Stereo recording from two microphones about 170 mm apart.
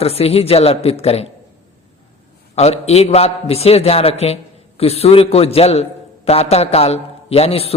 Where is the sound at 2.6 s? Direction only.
35° left (ahead or behind).